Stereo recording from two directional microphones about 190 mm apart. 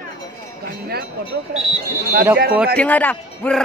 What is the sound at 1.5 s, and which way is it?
Speech, 55° right (ahead or behind).